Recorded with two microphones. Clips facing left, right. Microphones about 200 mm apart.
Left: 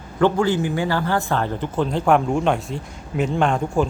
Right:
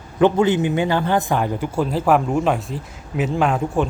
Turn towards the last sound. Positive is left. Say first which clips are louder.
# even
turn(degrees=-5)  # may be behind; listen again after turning